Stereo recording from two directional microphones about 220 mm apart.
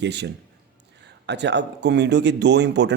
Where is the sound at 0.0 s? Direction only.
50° right (ahead or behind).